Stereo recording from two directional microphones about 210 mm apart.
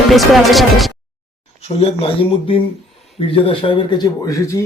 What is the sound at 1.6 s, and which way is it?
Speech, 30° left (ahead or behind).